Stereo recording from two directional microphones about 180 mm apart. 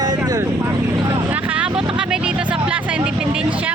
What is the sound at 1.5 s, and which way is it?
Vehicle, 5° right (ahead or behind).